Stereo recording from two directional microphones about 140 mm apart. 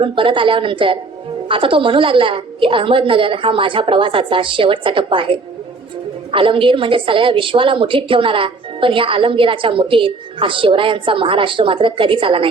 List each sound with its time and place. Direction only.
0.0 s a woman's voice: 40° right (ahead or behind)